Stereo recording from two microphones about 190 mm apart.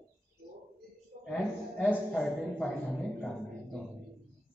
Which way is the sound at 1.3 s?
5° left (ahead or behind).